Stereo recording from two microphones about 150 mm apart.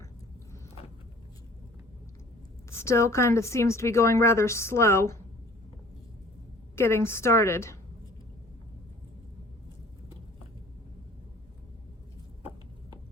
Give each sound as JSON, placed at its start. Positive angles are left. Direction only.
{"t": 2.6, "sound": "speech", "side_deg": 20}
{"t": 6.7, "sound": "a woman's voice", "side_deg": 15}